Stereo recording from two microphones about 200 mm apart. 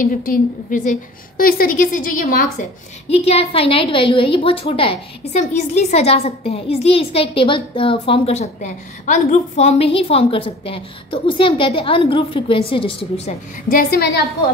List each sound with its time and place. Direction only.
0.0 s a woman's voice: 45° left (ahead or behind)
3.1 s a woman's voice: 30° left (ahead or behind)
13.7 s a woman's voice: 50° left (ahead or behind)